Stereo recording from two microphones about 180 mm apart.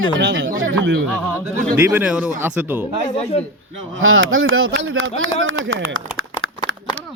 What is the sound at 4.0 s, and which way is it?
Speech, 90° right.